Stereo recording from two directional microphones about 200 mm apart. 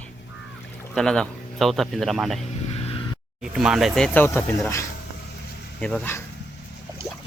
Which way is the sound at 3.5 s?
Centre (ahead or behind).